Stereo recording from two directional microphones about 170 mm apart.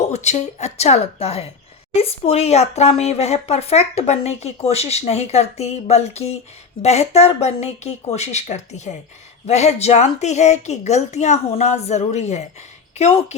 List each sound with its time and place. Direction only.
0.0 s speech: 40° left (ahead or behind)